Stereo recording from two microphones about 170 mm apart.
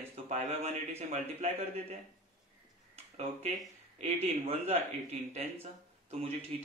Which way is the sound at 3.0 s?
40° right (ahead or behind).